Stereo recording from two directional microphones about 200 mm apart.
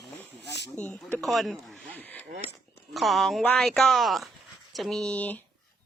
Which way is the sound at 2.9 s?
Centre (ahead or behind).